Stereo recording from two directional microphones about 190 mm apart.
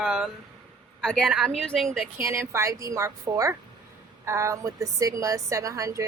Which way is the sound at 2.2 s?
15° right (ahead or behind).